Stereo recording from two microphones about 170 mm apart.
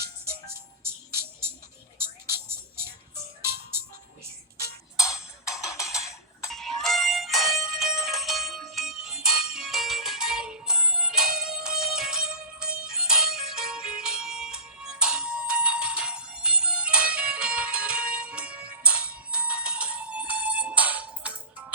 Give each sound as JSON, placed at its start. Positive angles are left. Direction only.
{"t": 2.5, "sound": "music", "side_deg": -15}
{"t": 4.9, "sound": "cowbell", "side_deg": 20}
{"t": 6.5, "sound": "music", "side_deg": 0}